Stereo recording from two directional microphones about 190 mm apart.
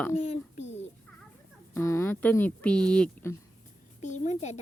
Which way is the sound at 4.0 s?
40° left (ahead or behind).